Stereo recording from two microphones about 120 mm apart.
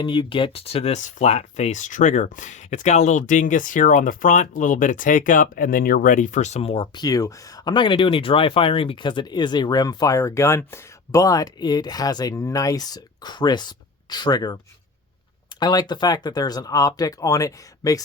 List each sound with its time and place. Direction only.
0.0 s speech: 45° left (ahead or behind)
6.9 s speech: 30° left (ahead or behind)